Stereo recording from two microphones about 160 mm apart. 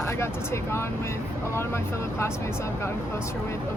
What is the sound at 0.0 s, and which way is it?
Speech, 15° left (ahead or behind).